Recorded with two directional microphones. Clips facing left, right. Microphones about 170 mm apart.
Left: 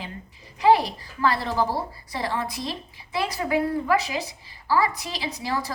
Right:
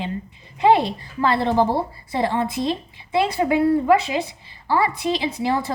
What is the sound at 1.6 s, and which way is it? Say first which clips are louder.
A woman's voice: right 5 dB; 25° right (ahead or behind).